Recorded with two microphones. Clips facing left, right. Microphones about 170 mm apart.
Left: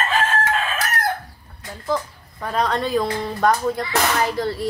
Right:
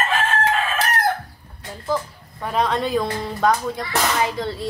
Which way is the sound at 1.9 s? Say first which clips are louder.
Even; 5° right (ahead or behind).